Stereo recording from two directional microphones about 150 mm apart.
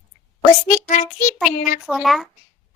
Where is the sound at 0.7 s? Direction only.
60° left (ahead or behind).